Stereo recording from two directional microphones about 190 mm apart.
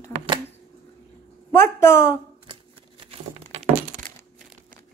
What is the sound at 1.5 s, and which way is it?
Speech, 15° left (ahead or behind).